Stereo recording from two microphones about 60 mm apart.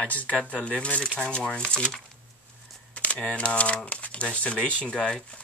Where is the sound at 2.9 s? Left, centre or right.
Left.